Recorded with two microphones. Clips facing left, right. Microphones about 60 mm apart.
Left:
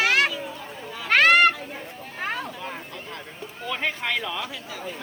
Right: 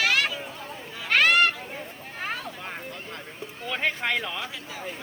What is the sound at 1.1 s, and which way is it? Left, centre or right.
Children playing, centre.